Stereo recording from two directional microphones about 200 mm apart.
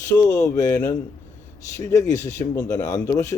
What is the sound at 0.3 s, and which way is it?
Speech, 15° left (ahead or behind).